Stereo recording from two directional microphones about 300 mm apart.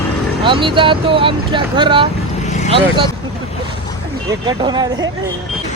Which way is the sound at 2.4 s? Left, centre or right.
Left.